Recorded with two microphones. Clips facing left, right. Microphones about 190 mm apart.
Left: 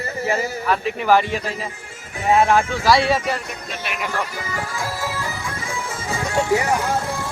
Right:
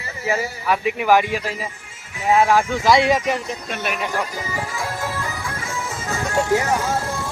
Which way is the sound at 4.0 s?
15° right (ahead or behind).